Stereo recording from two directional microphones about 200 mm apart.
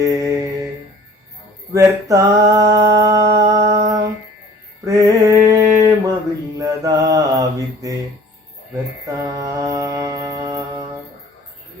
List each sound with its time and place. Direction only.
0.0 s mantra: 15° right (ahead or behind)
1.7 s a sound: 15° right (ahead or behind)
4.9 s mantra: 15° right (ahead or behind)